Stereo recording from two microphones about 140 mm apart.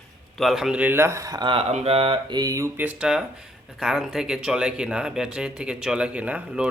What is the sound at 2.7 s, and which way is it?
Speech, 10° right (ahead or behind).